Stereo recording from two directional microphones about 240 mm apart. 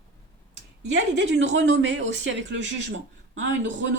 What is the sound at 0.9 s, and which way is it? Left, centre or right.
Speech, right.